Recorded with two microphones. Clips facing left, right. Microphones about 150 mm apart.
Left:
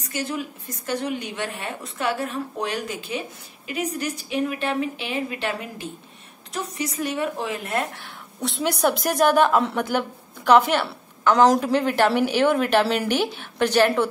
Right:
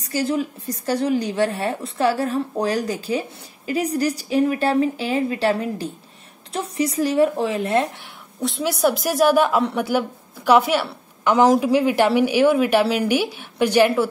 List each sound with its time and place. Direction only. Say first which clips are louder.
0.0 s a woman's voice: right 6 dB; 30° right (ahead or behind)
8.4 s a woman's voice: right 2 dB; centre (ahead or behind)